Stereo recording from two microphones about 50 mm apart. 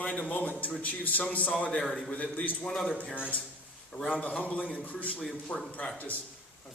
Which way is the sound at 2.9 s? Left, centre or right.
Left.